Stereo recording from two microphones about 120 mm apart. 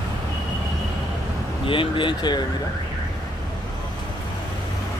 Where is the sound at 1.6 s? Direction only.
45° left (ahead or behind).